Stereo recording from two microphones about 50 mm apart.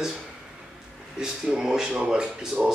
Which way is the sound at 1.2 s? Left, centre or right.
Centre.